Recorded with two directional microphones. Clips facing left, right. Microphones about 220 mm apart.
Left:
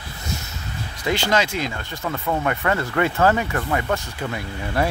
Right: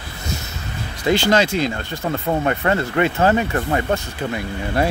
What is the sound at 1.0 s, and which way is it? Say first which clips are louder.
Speech: right 5 dB; 30° right (ahead or behind).